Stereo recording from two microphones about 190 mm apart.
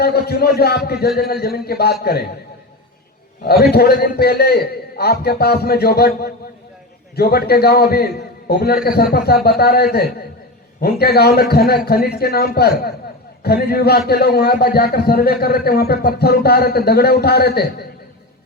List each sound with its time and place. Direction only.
0.0 s a man's voice: 55° left (ahead or behind)
3.4 s a man's voice: 55° left (ahead or behind)